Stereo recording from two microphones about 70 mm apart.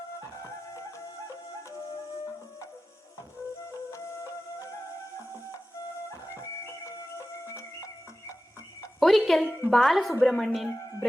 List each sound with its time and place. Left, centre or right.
3.9 s music: left
6.8 s music: left
9.0 s a woman's voice: centre